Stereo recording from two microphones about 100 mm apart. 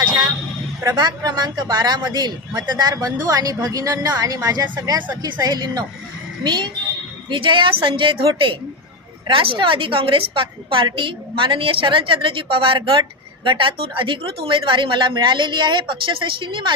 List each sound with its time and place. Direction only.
0.9 s a woman's voice: 40° right (ahead or behind)
9.3 s a woman's voice: 60° right (ahead or behind)